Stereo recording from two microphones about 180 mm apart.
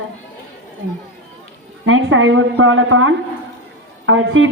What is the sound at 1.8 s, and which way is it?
A woman's voice, 90° right.